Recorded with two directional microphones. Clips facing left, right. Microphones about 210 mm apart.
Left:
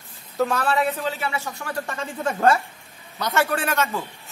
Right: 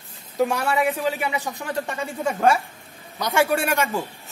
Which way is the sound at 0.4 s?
15° right (ahead or behind).